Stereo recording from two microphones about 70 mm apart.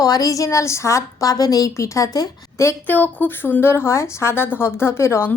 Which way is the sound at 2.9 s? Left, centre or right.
Left.